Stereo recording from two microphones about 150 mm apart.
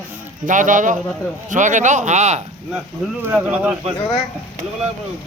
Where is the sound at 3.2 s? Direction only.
10° right (ahead or behind).